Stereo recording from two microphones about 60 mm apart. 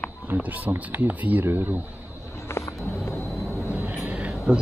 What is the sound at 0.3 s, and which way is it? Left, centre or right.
Speech, right.